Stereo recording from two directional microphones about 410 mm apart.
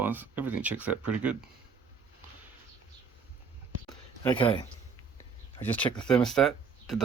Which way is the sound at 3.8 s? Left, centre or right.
Centre.